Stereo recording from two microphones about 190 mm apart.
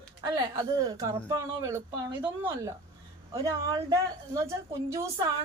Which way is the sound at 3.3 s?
20° right (ahead or behind).